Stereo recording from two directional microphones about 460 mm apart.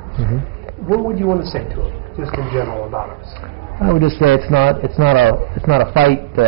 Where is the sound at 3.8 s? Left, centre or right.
Left.